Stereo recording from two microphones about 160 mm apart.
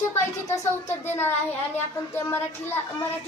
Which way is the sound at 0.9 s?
15° left (ahead or behind).